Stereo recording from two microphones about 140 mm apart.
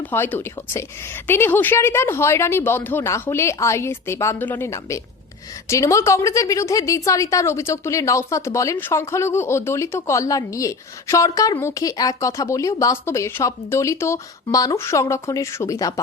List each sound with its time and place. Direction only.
0.0 s a woman's voice: 15° left (ahead or behind)